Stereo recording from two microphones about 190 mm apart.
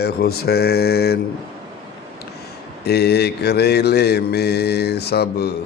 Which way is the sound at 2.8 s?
60° left (ahead or behind).